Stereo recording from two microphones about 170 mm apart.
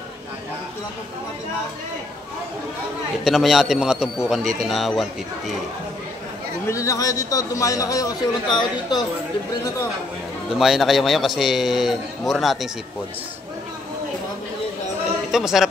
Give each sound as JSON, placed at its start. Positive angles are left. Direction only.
{"t": 3.3, "sound": "a man's voice", "side_deg": 0}
{"t": 6.7, "sound": "a man's voice", "side_deg": 20}
{"t": 10.6, "sound": "a man's voice", "side_deg": 0}
{"t": 15.3, "sound": "a man's voice", "side_deg": 0}